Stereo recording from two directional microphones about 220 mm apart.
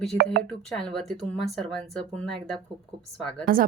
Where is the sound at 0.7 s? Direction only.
Centre (ahead or behind).